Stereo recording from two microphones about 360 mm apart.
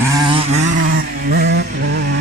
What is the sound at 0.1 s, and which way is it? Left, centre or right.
Vehicle, centre.